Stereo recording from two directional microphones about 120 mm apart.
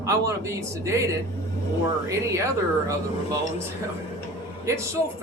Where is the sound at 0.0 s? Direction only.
25° right (ahead or behind).